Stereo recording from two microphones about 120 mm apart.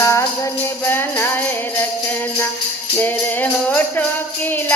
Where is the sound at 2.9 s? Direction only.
15° left (ahead or behind).